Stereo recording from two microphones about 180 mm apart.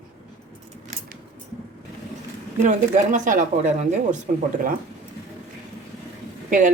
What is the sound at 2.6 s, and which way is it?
Speech, 45° right (ahead or behind).